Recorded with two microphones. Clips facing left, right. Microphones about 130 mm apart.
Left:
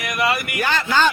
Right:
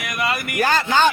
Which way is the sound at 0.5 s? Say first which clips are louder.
Right 3 dB; 40° right (ahead or behind).